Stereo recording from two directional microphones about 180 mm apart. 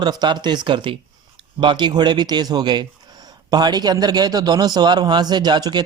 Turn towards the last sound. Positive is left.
turn(degrees=-20)  # may be behind; listen again after turning